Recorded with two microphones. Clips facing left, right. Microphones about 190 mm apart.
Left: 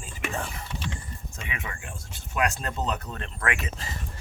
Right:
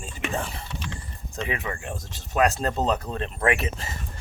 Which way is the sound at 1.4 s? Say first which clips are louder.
Right 9 dB; 35° right (ahead or behind).